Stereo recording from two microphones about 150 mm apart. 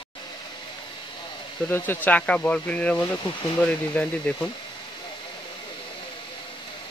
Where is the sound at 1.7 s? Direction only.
15° left (ahead or behind).